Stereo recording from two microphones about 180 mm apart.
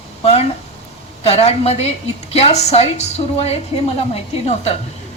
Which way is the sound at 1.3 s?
35° left (ahead or behind).